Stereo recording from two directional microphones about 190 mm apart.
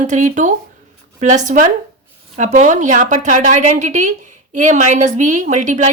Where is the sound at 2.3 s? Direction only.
40° right (ahead or behind).